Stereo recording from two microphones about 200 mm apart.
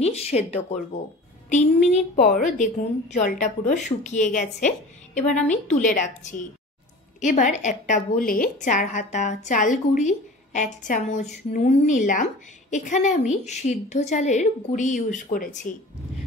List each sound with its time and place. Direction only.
0.0 s a woman's voice: 30° left (ahead or behind)